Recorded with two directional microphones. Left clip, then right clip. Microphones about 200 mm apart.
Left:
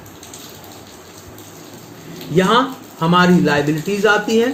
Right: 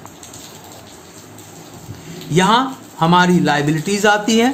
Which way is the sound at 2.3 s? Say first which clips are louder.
Even; 60° right (ahead or behind).